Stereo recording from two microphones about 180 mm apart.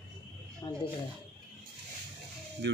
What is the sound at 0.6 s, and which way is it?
Speech, 20° left (ahead or behind).